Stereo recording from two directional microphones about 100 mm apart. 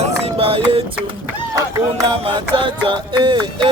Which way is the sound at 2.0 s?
55° right (ahead or behind).